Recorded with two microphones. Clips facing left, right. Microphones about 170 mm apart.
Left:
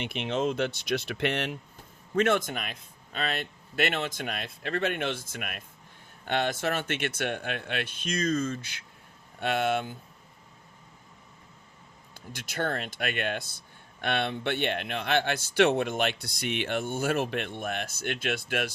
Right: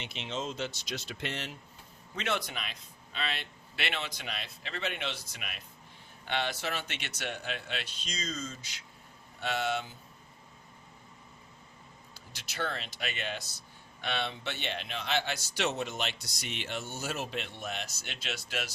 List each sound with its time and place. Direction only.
0.0 s speech: 55° left (ahead or behind)
2.1 s speech: 50° left (ahead or behind)
12.3 s speech: 50° left (ahead or behind)